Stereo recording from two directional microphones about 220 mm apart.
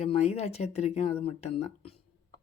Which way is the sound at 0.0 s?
30° left (ahead or behind).